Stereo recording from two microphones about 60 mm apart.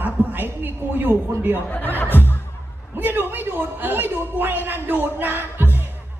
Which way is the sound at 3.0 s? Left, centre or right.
Right.